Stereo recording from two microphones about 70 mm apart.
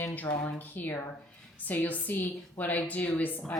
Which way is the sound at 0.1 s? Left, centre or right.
Left.